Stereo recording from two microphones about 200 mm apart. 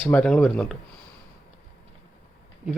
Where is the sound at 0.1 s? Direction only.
5° left (ahead or behind).